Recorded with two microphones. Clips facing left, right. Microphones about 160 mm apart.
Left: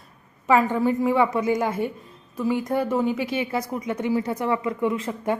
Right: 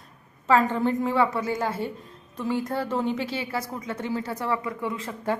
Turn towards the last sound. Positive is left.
turn(degrees=20)  # may be behind; listen again after turning